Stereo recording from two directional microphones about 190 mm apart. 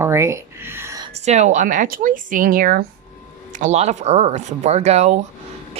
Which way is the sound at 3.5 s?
40° right (ahead or behind).